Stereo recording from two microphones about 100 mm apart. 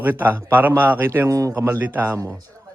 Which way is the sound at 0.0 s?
20° right (ahead or behind).